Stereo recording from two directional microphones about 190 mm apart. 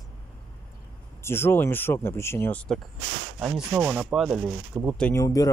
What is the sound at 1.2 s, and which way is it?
Speech, 10° left (ahead or behind).